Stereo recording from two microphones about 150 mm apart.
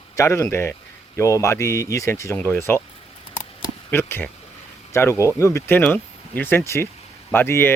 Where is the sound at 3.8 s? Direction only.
15° left (ahead or behind).